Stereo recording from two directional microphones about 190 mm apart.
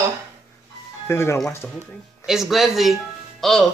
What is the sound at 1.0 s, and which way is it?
Speech, 15° left (ahead or behind).